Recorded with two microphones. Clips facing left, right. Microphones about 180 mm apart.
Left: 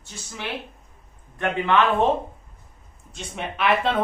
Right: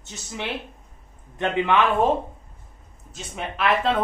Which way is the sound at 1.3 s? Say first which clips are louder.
Even; 15° right (ahead or behind).